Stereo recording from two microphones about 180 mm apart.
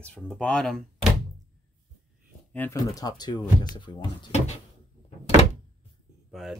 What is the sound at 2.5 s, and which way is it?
Speech, 10° left (ahead or behind).